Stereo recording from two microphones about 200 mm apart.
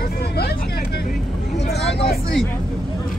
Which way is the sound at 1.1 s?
Centre (ahead or behind).